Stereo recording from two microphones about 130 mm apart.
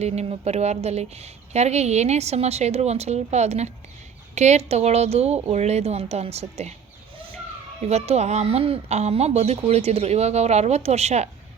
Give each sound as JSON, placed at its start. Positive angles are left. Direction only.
{"t": 0.0, "sound": "a woman's voice", "side_deg": -55}
{"t": 7.9, "sound": "a woman's voice", "side_deg": -55}